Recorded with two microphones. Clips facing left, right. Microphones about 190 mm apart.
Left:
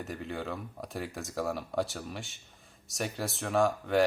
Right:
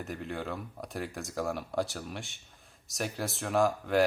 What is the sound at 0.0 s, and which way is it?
Speech, centre (ahead or behind).